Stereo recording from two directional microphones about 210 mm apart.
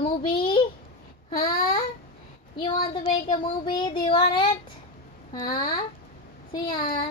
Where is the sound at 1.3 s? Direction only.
45° left (ahead or behind).